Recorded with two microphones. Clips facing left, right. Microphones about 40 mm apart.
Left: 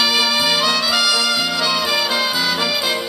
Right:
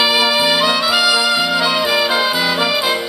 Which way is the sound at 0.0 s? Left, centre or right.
Centre.